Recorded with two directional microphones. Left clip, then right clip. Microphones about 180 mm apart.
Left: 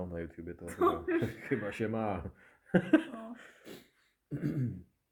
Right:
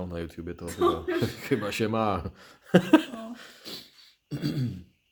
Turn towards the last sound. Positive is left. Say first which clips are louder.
# right 5 dB
turn(degrees=5)  # may be behind; listen again after turning